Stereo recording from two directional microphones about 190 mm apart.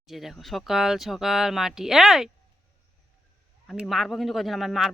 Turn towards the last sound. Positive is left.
turn(degrees=0)  # may be behind; listen again after turning